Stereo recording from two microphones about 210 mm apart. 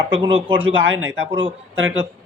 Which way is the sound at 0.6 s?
65° right (ahead or behind).